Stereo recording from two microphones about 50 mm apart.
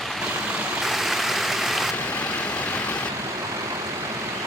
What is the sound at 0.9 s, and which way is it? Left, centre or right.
Stream, centre.